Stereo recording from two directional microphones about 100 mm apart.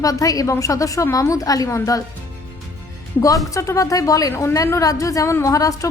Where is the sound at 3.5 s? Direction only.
30° left (ahead or behind).